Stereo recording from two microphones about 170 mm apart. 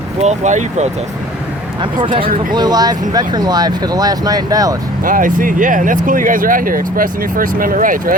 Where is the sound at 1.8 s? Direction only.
30° right (ahead or behind).